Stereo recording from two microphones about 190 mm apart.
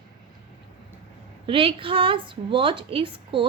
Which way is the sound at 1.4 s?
30° right (ahead or behind).